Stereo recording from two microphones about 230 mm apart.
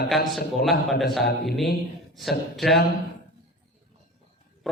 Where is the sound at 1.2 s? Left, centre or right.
Left.